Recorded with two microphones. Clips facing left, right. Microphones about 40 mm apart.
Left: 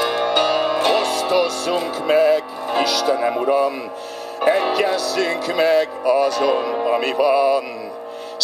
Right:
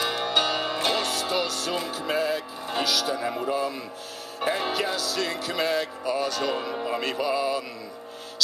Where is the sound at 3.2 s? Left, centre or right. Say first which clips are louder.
Left 9 dB; left.